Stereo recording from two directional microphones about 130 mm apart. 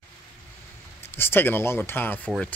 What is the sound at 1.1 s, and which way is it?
Speech, 15° left (ahead or behind).